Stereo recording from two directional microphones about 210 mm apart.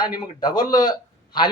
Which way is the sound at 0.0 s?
20° left (ahead or behind).